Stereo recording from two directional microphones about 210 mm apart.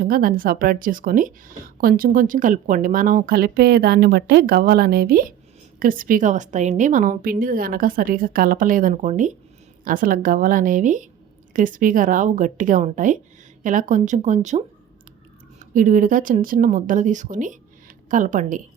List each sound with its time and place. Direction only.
0.0 s a woman's voice: 45° right (ahead or behind)